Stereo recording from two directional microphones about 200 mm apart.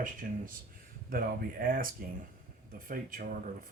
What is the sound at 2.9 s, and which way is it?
Speech, 45° right (ahead or behind).